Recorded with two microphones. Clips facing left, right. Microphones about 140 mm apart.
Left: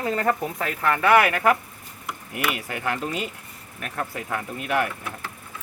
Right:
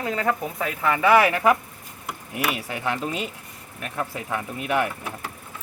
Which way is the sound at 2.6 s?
15° right (ahead or behind).